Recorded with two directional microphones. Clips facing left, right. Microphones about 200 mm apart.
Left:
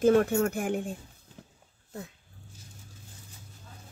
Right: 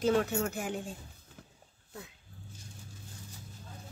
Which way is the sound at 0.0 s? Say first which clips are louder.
Left 6 dB; 50° left (ahead or behind).